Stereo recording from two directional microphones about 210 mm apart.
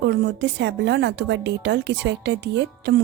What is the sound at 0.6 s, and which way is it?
Speech, 55° right (ahead or behind).